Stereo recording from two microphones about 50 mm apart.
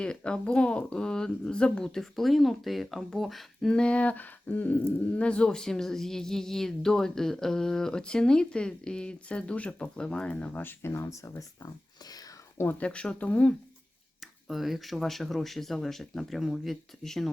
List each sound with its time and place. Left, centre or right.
0.0 s speech: centre
3.7 s speech: centre
5.2 s speech: left
10.5 s speech: left
10.9 s speech: left
12.8 s speech: left
14.4 s speech: centre